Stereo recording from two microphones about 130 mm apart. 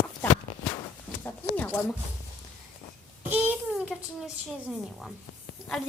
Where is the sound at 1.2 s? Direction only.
15° left (ahead or behind).